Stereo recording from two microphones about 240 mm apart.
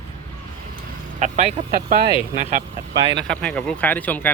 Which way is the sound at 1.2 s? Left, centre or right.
Right.